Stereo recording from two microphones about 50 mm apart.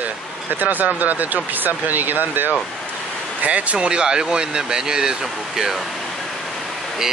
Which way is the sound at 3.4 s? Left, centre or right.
Right.